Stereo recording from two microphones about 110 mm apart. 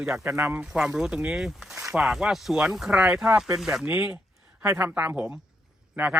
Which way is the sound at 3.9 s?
15° right (ahead or behind).